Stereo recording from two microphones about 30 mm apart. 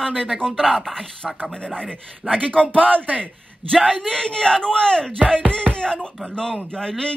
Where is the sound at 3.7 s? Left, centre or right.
Centre.